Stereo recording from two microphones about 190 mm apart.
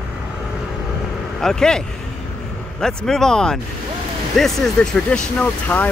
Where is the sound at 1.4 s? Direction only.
5° left (ahead or behind).